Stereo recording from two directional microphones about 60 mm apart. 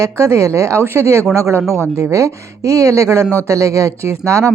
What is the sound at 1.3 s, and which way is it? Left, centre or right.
Speech, right.